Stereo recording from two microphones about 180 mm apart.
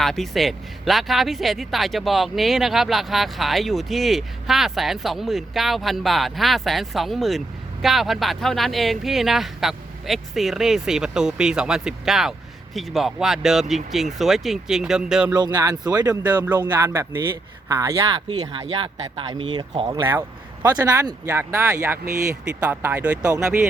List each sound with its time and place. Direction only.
0.0 s speech: centre (ahead or behind)
15.4 s speech: 20° right (ahead or behind)
20.1 s speech: 15° right (ahead or behind)